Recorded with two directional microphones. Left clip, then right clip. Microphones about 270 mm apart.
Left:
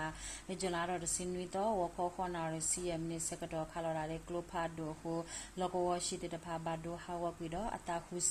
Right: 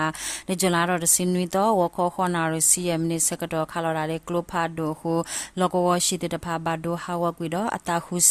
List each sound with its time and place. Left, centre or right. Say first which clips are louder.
0.0 s speech: right 16 dB; right